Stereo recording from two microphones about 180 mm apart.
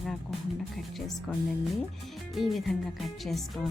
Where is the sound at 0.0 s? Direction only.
Centre (ahead or behind).